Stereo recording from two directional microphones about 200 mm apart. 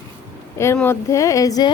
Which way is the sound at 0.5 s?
15° left (ahead or behind).